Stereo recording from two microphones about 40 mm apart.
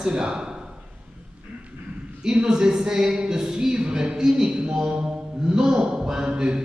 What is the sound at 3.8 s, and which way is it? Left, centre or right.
Speech, right.